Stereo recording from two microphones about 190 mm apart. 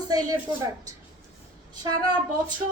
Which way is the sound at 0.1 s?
20° right (ahead or behind).